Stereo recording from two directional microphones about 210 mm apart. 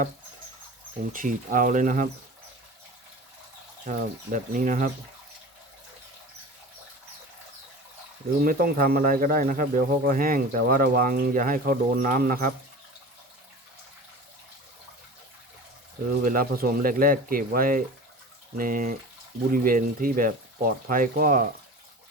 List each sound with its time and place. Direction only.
1.1 s speech: 40° right (ahead or behind)
3.8 s speech: 40° right (ahead or behind)
8.4 s speech: 45° right (ahead or behind)
16.2 s speech: 45° right (ahead or behind)